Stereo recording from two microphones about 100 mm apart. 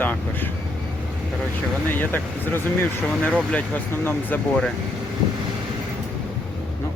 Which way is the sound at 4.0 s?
20° left (ahead or behind).